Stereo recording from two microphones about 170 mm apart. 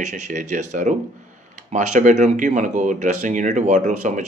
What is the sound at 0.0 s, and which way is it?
Speech, 45° right (ahead or behind).